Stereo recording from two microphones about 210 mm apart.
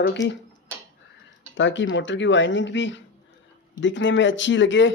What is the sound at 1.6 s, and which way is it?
Speech, 60° left (ahead or behind).